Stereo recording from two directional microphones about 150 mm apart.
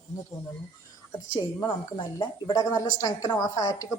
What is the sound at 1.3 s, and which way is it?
Speech, 25° left (ahead or behind).